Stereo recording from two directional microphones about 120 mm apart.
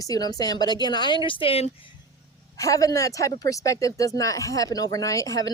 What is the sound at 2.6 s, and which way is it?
A woman's voice, 30° left (ahead or behind).